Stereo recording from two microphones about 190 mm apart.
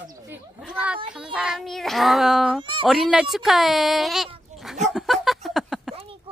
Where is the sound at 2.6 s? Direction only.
25° right (ahead or behind).